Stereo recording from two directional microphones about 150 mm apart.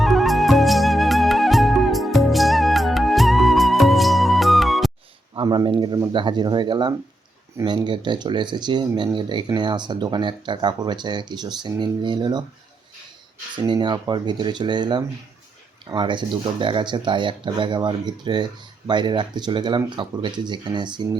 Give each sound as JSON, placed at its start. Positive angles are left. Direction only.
{"t": 0.0, "sound": "music", "side_deg": 0}
{"t": 5.3, "sound": "speech", "side_deg": -30}
{"t": 13.6, "sound": "speech", "side_deg": -30}